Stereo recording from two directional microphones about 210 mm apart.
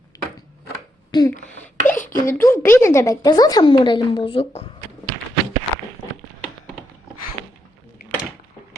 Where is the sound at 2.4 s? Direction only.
10° left (ahead or behind); by 4.7 s 30° left (ahead or behind).